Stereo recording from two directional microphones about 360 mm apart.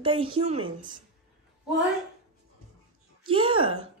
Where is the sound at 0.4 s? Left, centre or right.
Centre.